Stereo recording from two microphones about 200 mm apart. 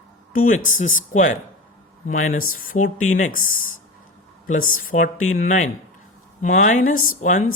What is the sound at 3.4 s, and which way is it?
Speech, 90° left.